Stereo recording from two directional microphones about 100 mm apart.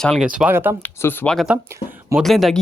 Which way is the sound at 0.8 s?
20° left (ahead or behind).